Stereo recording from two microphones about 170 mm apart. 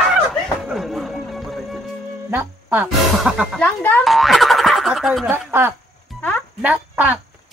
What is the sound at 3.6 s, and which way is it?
Speech, 10° left (ahead or behind).